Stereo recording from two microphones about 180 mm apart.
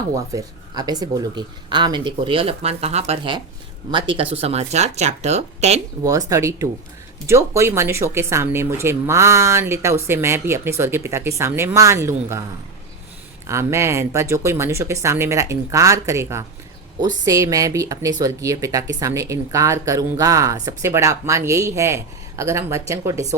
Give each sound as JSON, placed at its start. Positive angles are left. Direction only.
{"t": 0.3, "sound": "speech", "side_deg": -20}
{"t": 6.0, "sound": "speech", "side_deg": -20}
{"t": 13.5, "sound": "speech", "side_deg": -15}